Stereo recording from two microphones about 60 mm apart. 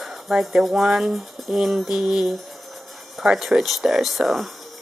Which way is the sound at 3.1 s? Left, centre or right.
Centre.